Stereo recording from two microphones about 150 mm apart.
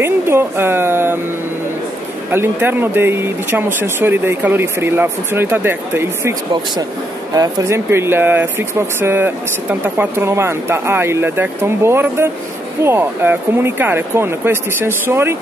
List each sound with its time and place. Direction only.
0.0 s speech: 15° right (ahead or behind)
2.3 s speech: 15° right (ahead or behind)
7.3 s speech: 20° right (ahead or behind)